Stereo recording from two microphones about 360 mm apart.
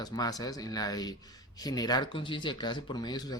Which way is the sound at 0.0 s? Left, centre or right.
Centre.